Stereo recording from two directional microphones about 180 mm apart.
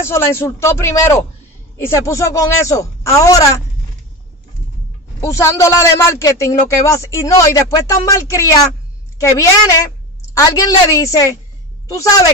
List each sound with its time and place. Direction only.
0.1 s a man's voice: 15° left (ahead or behind)
5.2 s a man's voice: 15° left (ahead or behind)